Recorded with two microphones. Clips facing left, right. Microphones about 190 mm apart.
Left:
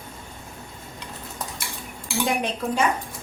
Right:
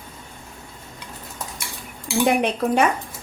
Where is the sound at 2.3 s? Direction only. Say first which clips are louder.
Right 6 dB; 60° right (ahead or behind).